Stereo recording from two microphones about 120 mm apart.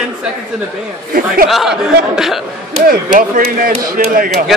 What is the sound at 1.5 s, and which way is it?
Speech, 5° right (ahead or behind).